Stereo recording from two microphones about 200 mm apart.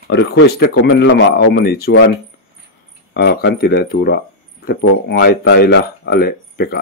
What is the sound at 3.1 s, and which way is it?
A man's voice, 55° left (ahead or behind).